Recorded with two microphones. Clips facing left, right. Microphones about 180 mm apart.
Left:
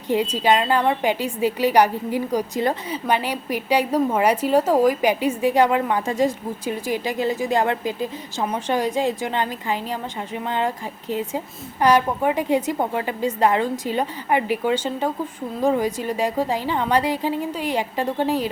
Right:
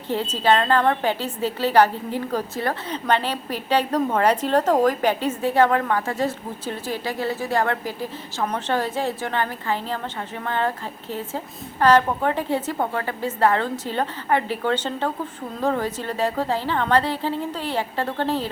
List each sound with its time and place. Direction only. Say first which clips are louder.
0.1 s a woman's voice: left 1 dB; 15° left (ahead or behind)